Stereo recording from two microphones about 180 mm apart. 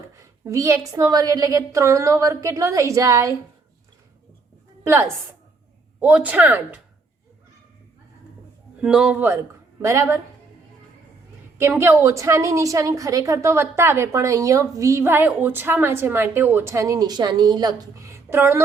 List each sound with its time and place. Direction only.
0.2 s a woman's voice: 15° right (ahead or behind)
4.8 s a woman's voice: 15° right (ahead or behind)
8.8 s a man's voice: 5° right (ahead or behind)
11.6 s a woman's voice: 15° right (ahead or behind)